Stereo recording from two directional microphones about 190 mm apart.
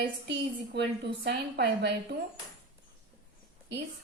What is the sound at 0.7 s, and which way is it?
A woman's voice, 60° right (ahead or behind).